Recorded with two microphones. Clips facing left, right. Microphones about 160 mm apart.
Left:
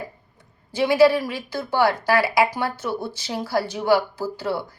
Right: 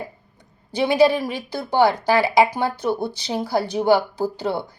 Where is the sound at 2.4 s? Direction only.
20° right (ahead or behind).